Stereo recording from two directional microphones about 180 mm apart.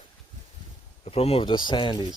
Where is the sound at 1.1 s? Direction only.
35° left (ahead or behind).